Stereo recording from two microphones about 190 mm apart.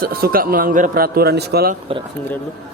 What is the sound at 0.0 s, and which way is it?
Speech, 50° right (ahead or behind).